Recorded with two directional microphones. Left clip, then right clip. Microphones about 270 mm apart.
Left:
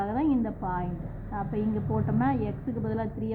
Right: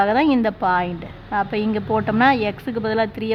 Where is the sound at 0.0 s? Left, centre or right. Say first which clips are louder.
Right 11 dB; right.